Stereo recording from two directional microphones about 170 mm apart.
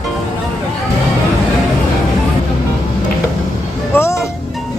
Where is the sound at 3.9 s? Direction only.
15° left (ahead or behind).